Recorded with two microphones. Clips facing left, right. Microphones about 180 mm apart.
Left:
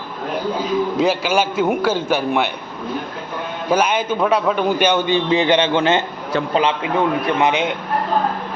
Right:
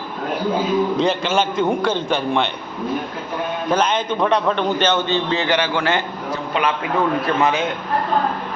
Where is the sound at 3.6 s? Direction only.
10° left (ahead or behind).